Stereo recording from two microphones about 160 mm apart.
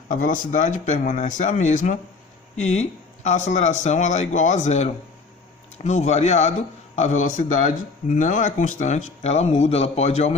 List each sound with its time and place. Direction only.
0.1 s speech: 55° left (ahead or behind)